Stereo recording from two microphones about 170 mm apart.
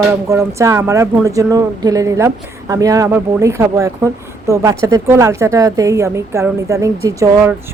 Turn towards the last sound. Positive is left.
turn(degrees=-15)  # may be behind; listen again after turning